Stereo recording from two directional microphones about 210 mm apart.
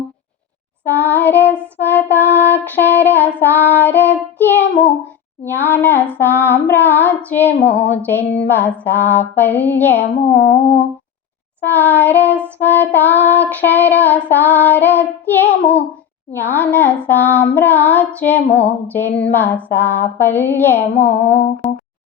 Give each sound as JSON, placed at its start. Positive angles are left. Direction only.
{"t": 0.9, "sound": "child singing", "side_deg": 10}
{"t": 10.2, "sound": "humming", "side_deg": 55}
{"t": 11.6, "sound": "child singing", "side_deg": 10}
{"t": 21.6, "sound": "music", "side_deg": 5}